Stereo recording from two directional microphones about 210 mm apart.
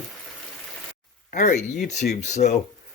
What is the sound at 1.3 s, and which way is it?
Speech, 40° left (ahead or behind).